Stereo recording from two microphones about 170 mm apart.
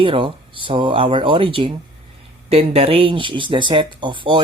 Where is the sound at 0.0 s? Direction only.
30° right (ahead or behind).